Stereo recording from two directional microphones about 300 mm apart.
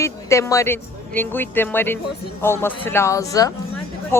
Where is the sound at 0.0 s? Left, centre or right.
Centre.